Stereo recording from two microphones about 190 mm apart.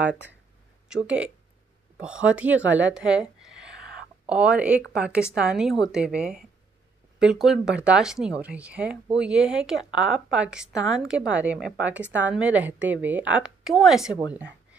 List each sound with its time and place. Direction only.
0.0 s a woman's voice: 10° right (ahead or behind)